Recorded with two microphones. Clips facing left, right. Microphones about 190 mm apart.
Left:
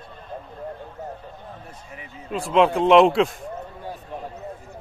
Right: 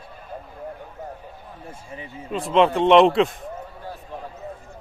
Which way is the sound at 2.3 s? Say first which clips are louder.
Even; centre (ahead or behind).